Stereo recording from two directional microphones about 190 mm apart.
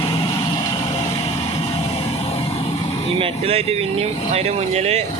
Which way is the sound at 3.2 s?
30° right (ahead or behind).